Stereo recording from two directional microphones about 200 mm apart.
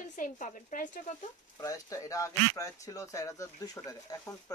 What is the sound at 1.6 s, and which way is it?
Speech, 15° left (ahead or behind).